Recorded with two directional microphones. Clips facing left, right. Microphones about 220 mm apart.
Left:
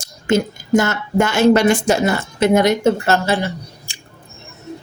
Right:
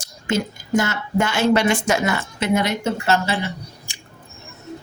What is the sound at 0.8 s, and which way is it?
Speech, 45° left (ahead or behind).